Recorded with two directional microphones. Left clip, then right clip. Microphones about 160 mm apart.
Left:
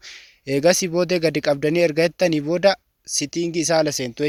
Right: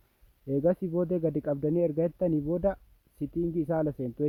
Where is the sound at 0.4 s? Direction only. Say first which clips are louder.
Left 10 dB; 20° left (ahead or behind).